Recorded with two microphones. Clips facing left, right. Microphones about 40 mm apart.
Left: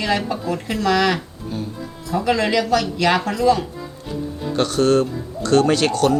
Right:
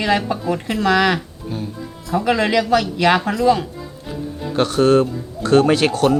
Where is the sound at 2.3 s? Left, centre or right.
Centre.